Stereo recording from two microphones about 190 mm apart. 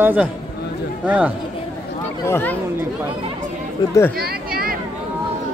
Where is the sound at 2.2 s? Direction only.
10° left (ahead or behind).